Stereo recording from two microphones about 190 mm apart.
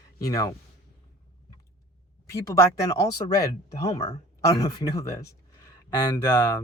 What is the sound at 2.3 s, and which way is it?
Speech, 15° left (ahead or behind).